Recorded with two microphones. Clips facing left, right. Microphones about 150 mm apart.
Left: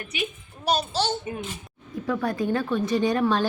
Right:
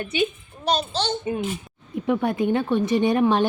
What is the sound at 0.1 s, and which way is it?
Speech, 30° right (ahead or behind).